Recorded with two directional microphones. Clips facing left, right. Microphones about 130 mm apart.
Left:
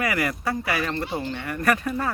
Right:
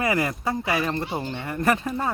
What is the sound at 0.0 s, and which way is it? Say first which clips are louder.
Speech: right 1 dB; 25° right (ahead or behind).